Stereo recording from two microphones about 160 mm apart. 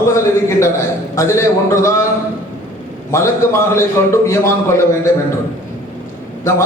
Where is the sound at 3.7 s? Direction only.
15° left (ahead or behind).